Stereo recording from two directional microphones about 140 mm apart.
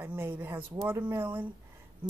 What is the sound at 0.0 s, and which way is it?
Speech, 15° right (ahead or behind).